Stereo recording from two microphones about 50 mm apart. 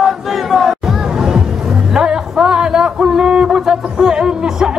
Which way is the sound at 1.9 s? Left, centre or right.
Centre.